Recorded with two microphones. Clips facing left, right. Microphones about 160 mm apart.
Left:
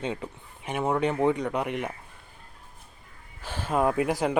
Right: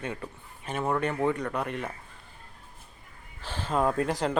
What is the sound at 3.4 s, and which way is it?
Speech, 10° left (ahead or behind).